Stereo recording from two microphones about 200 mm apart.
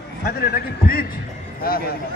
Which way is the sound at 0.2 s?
45° left (ahead or behind).